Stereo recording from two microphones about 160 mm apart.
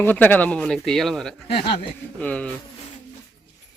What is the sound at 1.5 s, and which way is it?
Speech, 35° left (ahead or behind).